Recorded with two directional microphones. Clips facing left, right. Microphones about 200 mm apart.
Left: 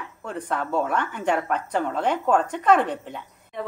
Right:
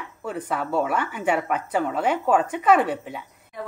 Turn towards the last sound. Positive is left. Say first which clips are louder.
# right 1 dB
turn(degrees=-10)  # may be behind; listen again after turning